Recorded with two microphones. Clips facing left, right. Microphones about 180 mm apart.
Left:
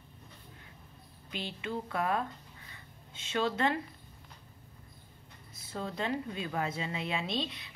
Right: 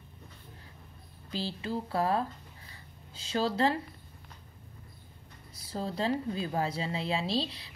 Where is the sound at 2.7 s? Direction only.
35° right (ahead or behind).